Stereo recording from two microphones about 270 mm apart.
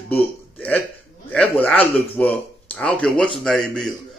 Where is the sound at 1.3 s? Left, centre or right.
Centre.